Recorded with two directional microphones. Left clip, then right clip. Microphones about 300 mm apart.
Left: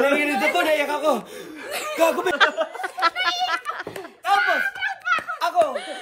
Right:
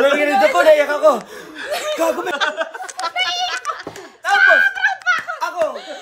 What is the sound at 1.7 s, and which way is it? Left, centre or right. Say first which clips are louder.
Chuckle: right 7 dB; centre.